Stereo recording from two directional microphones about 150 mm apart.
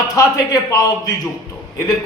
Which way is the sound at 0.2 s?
25° left (ahead or behind).